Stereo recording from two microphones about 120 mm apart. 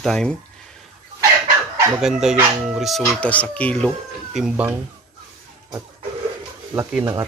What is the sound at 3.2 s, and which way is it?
Speech, 10° left (ahead or behind).